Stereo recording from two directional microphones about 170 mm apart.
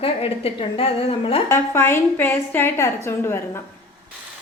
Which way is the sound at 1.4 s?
15° left (ahead or behind).